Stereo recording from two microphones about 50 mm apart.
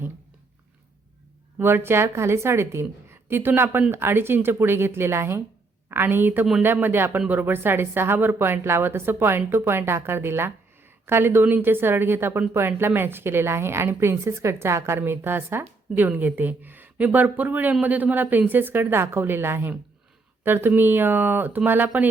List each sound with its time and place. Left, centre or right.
1.6 s speech: right
5.9 s a woman's voice: right
14.9 s a woman's voice: right